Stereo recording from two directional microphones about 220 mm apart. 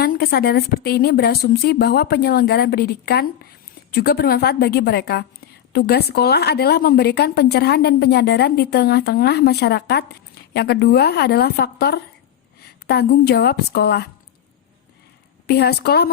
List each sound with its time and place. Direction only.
0.0 s speech: 45° left (ahead or behind)
15.4 s speech: 45° left (ahead or behind)